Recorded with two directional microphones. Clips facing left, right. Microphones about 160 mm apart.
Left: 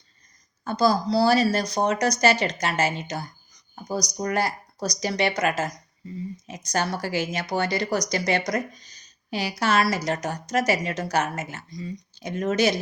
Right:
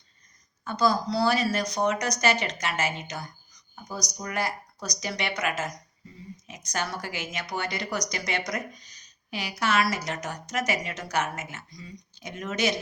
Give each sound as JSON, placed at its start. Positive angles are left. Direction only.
{"t": 0.6, "sound": "speech", "side_deg": 35}